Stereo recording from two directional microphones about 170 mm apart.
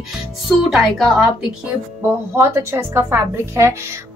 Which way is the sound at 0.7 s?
Centre (ahead or behind).